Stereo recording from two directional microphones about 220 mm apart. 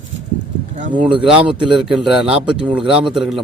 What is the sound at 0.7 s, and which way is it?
Speech, 35° right (ahead or behind).